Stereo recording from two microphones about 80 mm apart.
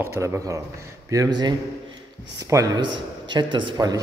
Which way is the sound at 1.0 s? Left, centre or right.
Right.